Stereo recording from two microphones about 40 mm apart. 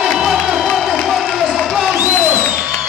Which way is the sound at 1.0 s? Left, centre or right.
Centre.